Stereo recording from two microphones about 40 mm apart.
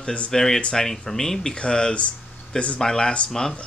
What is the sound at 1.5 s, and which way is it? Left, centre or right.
Speech, left.